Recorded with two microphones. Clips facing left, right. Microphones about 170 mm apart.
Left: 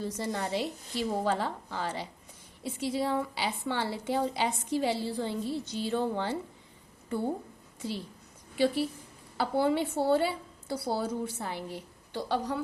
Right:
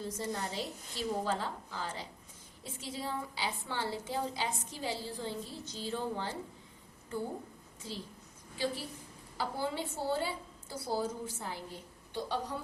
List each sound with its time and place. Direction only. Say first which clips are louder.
0.0 s a woman's voice: left 4 dB; 75° left (ahead or behind)
8.5 s a woman's voice: left 9 dB; 70° left (ahead or behind)